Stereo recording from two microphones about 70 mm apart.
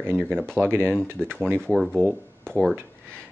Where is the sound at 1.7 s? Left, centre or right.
Centre.